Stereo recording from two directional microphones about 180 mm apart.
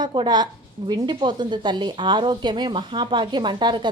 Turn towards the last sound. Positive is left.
turn(degrees=-25)  # may be behind; listen again after turning